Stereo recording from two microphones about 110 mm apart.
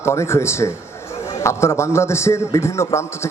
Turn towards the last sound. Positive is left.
turn(degrees=25)  # may be behind; listen again after turning